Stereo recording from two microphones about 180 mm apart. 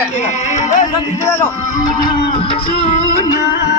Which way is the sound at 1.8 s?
25° left (ahead or behind).